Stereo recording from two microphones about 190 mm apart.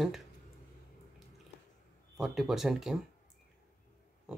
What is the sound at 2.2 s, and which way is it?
Speech, centre (ahead or behind).